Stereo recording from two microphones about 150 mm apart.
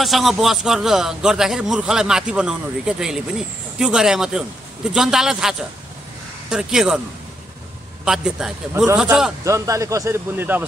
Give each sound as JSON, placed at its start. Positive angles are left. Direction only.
{"t": 0.0, "sound": "a man's voice", "side_deg": 0}
{"t": 8.0, "sound": "a man's voice", "side_deg": -5}
{"t": 9.4, "sound": "speech", "side_deg": -20}